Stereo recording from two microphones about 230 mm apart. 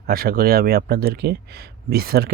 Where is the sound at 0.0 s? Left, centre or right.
Right.